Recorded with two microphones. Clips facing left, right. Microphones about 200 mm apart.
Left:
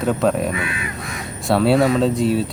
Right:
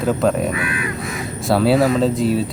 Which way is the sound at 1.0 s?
Centre (ahead or behind).